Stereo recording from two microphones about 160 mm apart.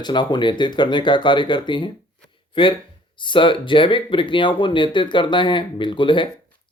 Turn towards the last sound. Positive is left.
turn(degrees=30)  # may be behind; listen again after turning